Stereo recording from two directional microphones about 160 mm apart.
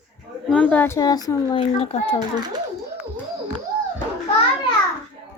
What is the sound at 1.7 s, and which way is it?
Speech, 40° left (ahead or behind).